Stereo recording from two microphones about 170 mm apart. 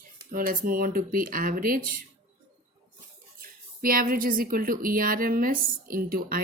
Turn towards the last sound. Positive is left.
turn(degrees=-60)  # may be behind; listen again after turning